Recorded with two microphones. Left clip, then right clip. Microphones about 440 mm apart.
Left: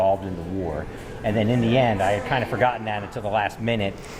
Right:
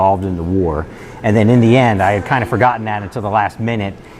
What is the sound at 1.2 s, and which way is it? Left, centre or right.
Speech, right.